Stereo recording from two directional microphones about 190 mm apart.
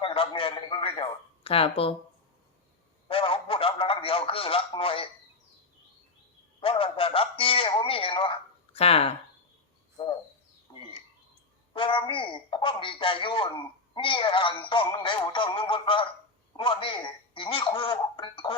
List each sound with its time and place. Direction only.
0.0 s a man's voice: 25° left (ahead or behind)
3.1 s speech: 30° left (ahead or behind)
6.6 s speech: 30° left (ahead or behind)
11.7 s speech: 25° left (ahead or behind)